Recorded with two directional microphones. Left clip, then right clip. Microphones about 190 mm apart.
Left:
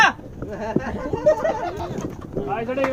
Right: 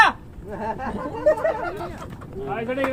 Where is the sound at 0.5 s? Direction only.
20° right (ahead or behind).